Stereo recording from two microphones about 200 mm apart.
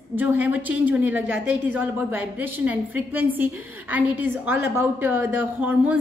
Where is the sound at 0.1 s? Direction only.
10° right (ahead or behind).